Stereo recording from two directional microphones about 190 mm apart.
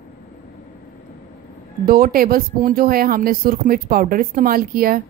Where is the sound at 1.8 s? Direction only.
50° right (ahead or behind).